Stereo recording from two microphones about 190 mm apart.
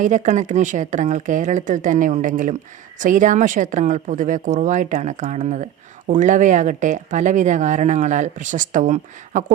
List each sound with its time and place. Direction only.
0.0 s speech: 40° right (ahead or behind)